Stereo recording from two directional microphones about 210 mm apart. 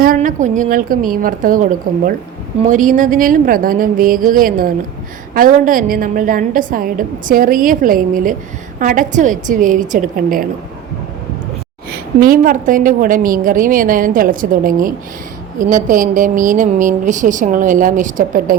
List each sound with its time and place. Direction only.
0.0 s a woman's voice: 40° right (ahead or behind)
2.6 s a woman's voice: 40° right (ahead or behind)
11.9 s a woman's voice: 45° right (ahead or behind)